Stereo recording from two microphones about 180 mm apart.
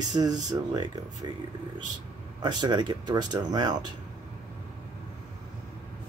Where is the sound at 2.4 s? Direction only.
25° right (ahead or behind).